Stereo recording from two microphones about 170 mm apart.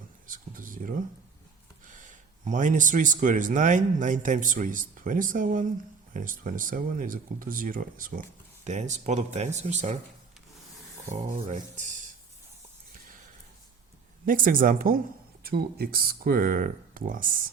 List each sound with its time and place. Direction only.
0.3 s a sound: 55° right (ahead or behind)
1.9 s speech: 50° right (ahead or behind)
8.6 s speech: 45° right (ahead or behind)
11.1 s speech: 50° right (ahead or behind)
14.3 s speech: 55° right (ahead or behind)